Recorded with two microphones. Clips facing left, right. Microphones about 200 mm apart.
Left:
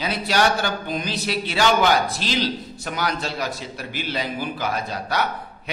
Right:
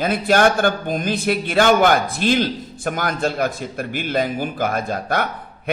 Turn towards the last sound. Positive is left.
turn(degrees=-50)  # may be behind; listen again after turning